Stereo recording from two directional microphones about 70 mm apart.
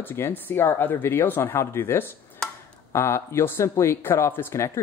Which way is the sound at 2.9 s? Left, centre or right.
Left.